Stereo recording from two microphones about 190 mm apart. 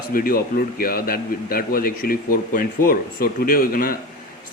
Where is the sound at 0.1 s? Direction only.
50° left (ahead or behind).